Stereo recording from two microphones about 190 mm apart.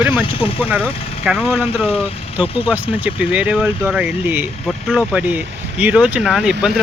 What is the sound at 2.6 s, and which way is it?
Speech, 10° right (ahead or behind).